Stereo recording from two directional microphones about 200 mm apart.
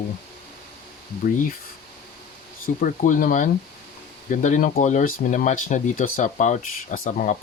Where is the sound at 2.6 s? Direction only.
45° left (ahead or behind).